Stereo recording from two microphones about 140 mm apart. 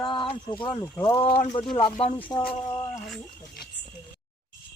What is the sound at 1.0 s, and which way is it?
Speech, 40° left (ahead or behind).